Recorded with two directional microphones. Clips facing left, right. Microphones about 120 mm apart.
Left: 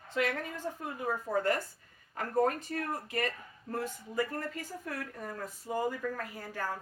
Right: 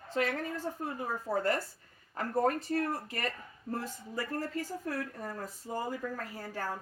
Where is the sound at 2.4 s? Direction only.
35° right (ahead or behind).